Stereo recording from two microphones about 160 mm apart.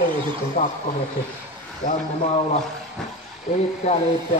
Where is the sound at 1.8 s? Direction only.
50° left (ahead or behind).